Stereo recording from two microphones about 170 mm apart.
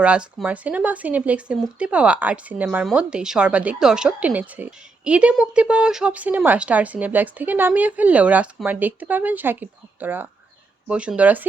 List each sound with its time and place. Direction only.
0.0 s speech: 5° right (ahead or behind)